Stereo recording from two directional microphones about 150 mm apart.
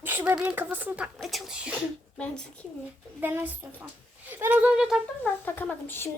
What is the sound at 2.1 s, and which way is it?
Speech, 5° left (ahead or behind).